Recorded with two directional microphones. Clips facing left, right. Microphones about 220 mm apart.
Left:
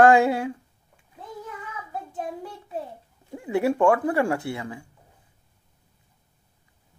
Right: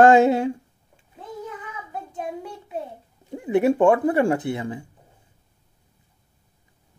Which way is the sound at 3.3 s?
20° right (ahead or behind).